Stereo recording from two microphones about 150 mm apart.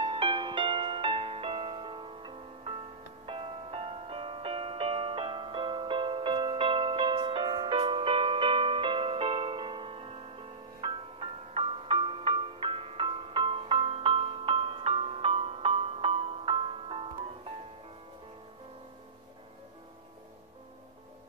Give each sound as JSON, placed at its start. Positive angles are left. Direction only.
{"t": 0.0, "sound": "music", "side_deg": -35}